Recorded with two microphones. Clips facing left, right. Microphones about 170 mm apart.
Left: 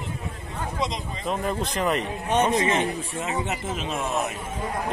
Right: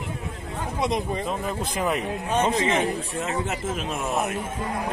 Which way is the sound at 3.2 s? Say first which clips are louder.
Even; centre (ahead or behind).